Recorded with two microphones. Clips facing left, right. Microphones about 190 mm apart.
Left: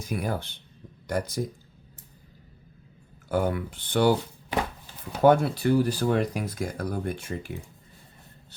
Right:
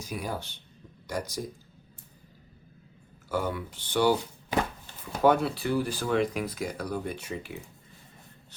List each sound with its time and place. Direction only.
0.0 s speech: 55° left (ahead or behind)
3.2 s speech: 55° left (ahead or behind)
5.2 s speech: 50° left (ahead or behind)